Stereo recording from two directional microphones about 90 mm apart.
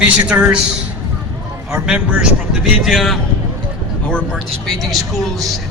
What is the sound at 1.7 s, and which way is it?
Speech, 10° right (ahead or behind).